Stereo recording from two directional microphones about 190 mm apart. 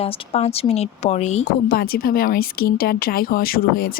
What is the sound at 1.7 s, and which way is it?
Speech, 50° left (ahead or behind).